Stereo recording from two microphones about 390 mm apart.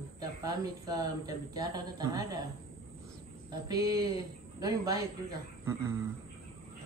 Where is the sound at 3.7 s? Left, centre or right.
Centre.